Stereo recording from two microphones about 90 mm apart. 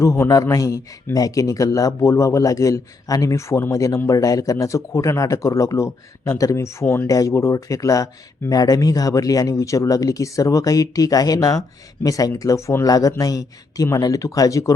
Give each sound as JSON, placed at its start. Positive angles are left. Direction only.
{"t": 0.0, "sound": "speech", "side_deg": 35}
{"t": 7.1, "sound": "speech", "side_deg": 40}